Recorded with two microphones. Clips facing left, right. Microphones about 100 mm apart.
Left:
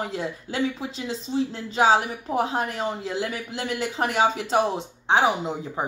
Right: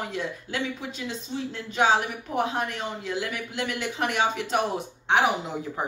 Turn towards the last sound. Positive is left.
turn(degrees=25)  # may be behind; listen again after turning